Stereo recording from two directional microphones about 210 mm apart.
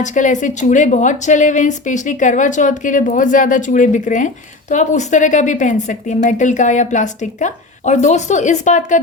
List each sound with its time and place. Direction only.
0.0 s a woman's voice: 35° left (ahead or behind)